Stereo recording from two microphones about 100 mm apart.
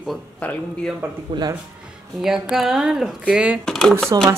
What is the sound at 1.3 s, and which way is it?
Speech, 50° right (ahead or behind).